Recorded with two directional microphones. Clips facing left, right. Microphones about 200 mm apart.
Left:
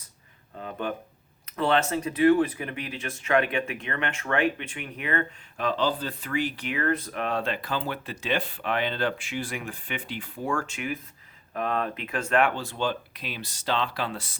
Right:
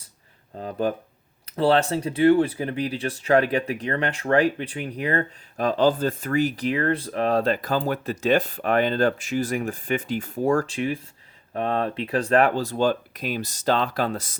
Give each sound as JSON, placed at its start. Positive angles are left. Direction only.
{"t": 0.5, "sound": "speech", "side_deg": -35}